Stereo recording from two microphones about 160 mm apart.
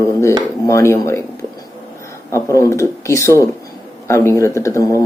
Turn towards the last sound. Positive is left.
turn(degrees=20)  # may be behind; listen again after turning